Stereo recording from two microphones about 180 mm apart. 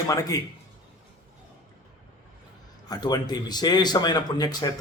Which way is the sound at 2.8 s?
20° left (ahead or behind).